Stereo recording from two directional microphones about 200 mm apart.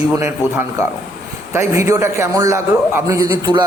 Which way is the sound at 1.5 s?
15° right (ahead or behind).